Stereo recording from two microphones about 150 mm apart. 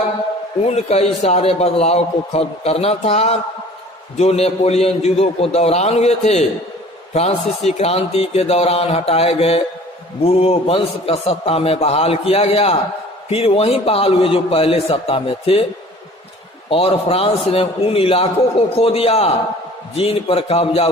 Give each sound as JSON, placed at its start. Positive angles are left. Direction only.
{"t": 0.6, "sound": "a man's voice", "side_deg": 45}
{"t": 16.6, "sound": "speech", "side_deg": 40}